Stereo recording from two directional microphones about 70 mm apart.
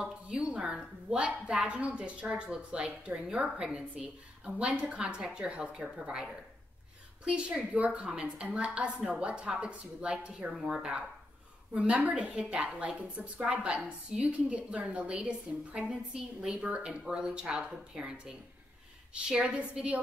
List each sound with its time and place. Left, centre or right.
0.0 s a woman's voice: centre
7.2 s a woman's voice: centre